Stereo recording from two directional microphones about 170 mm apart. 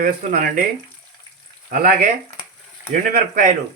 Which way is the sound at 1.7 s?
55° right (ahead or behind).